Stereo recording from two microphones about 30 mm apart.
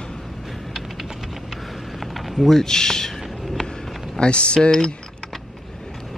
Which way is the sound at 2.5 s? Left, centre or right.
Centre.